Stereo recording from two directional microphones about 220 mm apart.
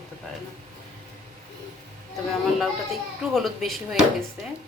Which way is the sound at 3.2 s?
Centre (ahead or behind).